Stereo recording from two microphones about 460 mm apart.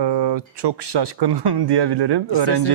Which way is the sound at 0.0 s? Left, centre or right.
Right.